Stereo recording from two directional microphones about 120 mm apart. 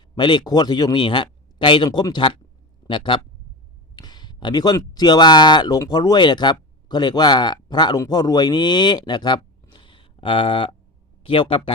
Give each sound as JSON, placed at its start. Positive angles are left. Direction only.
{"t": 0.2, "sound": "speech", "side_deg": 40}